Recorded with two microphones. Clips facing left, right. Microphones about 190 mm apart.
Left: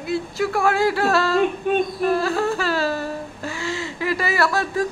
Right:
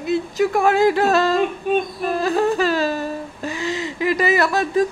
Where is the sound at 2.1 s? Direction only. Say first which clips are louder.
Right 7 dB; 20° right (ahead or behind).